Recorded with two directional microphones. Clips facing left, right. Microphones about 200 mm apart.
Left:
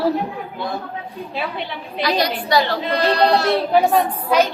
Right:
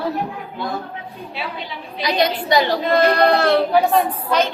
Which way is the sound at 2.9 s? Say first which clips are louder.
Right 3 dB; 50° right (ahead or behind).